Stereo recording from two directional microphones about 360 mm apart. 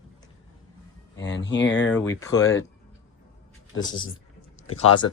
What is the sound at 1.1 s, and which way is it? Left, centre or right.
Speech, left.